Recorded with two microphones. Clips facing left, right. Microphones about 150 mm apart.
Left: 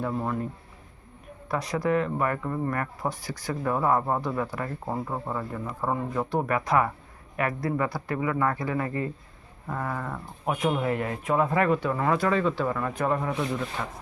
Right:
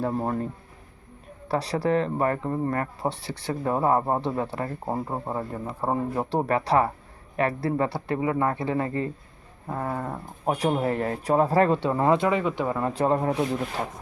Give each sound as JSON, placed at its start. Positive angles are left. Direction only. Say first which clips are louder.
{"t": 0.0, "sound": "speech", "louder": "right 2 dB", "side_deg": -35}
{"t": 1.5, "sound": "speech", "louder": "right 2 dB", "side_deg": -35}